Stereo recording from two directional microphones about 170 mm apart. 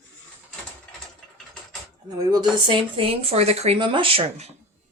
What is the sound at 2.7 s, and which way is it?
Speech, 30° right (ahead or behind).